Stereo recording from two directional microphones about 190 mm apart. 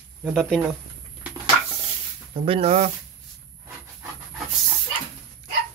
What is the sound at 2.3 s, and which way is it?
Speech, 30° right (ahead or behind).